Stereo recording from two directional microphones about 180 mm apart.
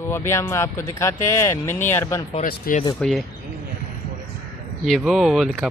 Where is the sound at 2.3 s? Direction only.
45° left (ahead or behind).